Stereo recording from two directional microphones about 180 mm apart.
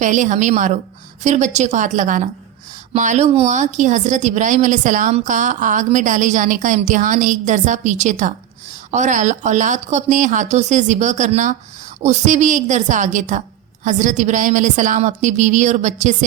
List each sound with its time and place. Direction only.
0.0 s speech: 45° right (ahead or behind)